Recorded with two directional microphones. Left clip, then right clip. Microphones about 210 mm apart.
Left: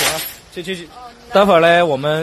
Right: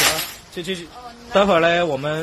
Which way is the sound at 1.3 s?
15° left (ahead or behind).